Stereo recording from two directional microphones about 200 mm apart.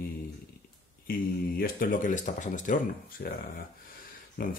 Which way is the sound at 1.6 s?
45° left (ahead or behind).